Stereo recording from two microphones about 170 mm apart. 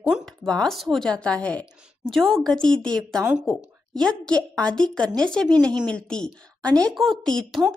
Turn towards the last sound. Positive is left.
turn(degrees=0)  # may be behind; listen again after turning